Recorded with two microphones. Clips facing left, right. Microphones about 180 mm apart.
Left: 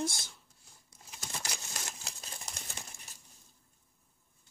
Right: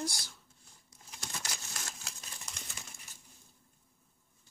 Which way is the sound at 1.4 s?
20° left (ahead or behind).